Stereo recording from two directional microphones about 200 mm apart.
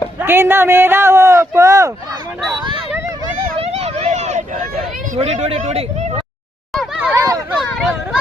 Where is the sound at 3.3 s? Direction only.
30° right (ahead or behind).